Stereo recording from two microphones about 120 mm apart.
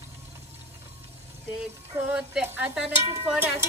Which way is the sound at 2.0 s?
10° right (ahead or behind).